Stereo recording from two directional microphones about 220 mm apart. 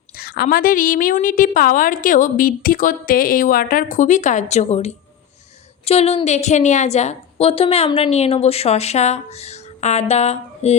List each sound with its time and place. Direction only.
0.2 s a woman's voice: 45° left (ahead or behind)